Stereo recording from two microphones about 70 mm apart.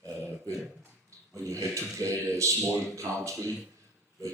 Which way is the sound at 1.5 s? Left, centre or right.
Right.